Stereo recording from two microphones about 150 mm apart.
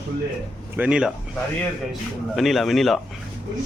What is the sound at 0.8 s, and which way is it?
Speech, 5° right (ahead or behind).